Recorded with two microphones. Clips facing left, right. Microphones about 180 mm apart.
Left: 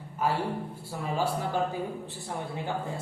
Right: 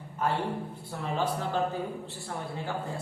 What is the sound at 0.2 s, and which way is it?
Speech, 10° left (ahead or behind).